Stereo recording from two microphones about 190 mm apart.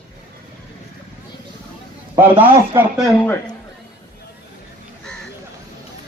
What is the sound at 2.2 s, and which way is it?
Speech, 10° right (ahead or behind).